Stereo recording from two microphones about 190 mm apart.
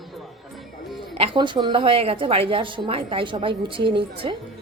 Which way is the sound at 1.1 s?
30° right (ahead or behind).